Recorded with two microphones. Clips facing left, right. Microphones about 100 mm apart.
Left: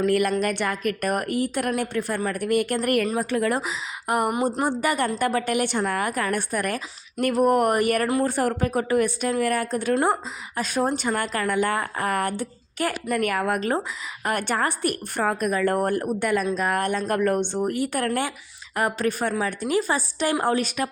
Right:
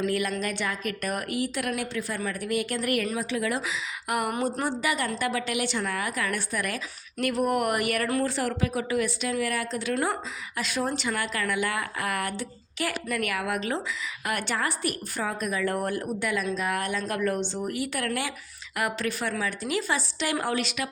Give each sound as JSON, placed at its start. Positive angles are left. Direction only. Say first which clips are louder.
{"t": 0.0, "sound": "a woman's voice", "louder": "left 6 dB", "side_deg": 55}
{"t": 4.1, "sound": "speech", "louder": "left 5 dB", "side_deg": 35}
{"t": 4.6, "sound": "a woman's voice", "louder": "left 5 dB", "side_deg": 50}